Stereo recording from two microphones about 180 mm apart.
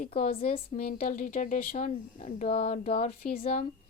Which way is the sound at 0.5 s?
45° left (ahead or behind).